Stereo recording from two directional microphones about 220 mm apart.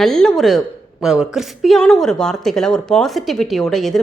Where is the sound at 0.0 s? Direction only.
5° left (ahead or behind).